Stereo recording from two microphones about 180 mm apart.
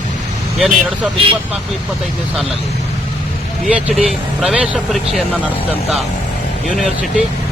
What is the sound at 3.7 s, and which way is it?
Speech, 5° right (ahead or behind).